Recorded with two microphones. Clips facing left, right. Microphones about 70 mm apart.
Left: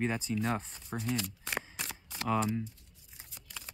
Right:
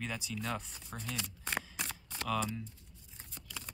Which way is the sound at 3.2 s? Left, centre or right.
Centre.